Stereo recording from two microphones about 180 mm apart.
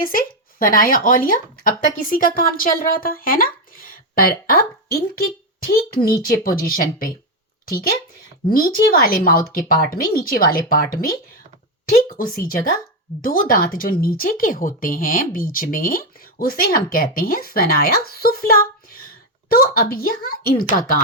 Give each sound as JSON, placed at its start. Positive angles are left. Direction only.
{"t": 0.0, "sound": "speech", "side_deg": 50}
{"t": 8.4, "sound": "speech", "side_deg": 55}